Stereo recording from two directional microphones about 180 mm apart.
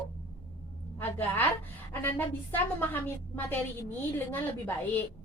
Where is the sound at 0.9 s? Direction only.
10° left (ahead or behind).